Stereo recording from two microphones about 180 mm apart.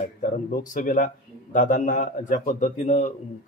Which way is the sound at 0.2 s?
50° left (ahead or behind).